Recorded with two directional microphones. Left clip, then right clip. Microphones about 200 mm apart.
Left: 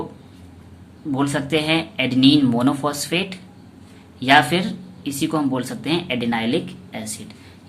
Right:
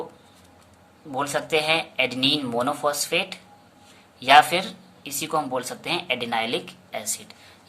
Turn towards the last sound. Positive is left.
turn(degrees=-30)  # may be behind; listen again after turning